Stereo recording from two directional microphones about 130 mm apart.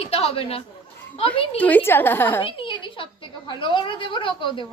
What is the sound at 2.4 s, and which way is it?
A woman's voice, 40° left (ahead or behind).